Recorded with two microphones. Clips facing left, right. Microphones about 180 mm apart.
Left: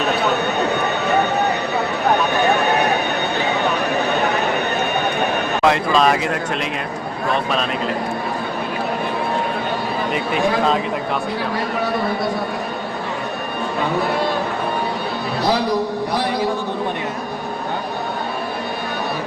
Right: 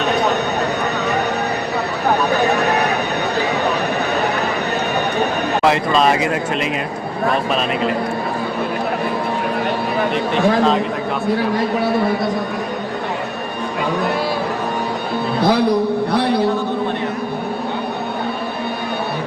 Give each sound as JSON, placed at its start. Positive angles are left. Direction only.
{"t": 5.6, "sound": "speech", "side_deg": 0}
{"t": 16.1, "sound": "a man's voice", "side_deg": -60}